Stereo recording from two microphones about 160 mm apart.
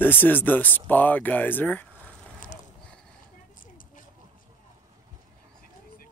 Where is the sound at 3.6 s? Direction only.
60° left (ahead or behind).